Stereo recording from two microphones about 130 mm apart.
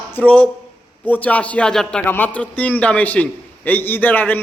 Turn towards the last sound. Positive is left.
turn(degrees=15)  # may be behind; listen again after turning